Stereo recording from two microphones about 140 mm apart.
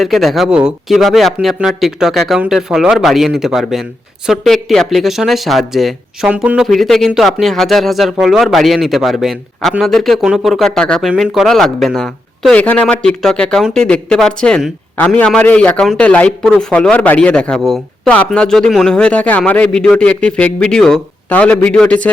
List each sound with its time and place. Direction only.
0.0 s a man's voice: centre (ahead or behind)